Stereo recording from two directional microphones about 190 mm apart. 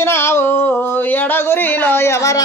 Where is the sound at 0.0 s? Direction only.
15° left (ahead or behind).